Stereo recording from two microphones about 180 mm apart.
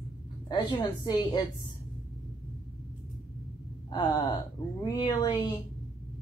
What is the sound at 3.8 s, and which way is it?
A woman's voice, 25° left (ahead or behind).